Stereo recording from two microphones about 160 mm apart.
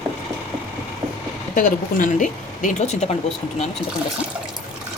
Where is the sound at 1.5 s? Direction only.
55° left (ahead or behind).